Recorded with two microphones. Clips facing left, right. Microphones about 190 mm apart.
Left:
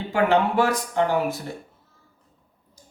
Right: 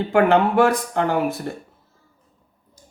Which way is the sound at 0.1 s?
60° right (ahead or behind).